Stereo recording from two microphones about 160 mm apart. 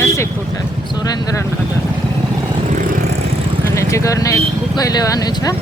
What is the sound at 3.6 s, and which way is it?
Speech, 20° left (ahead or behind).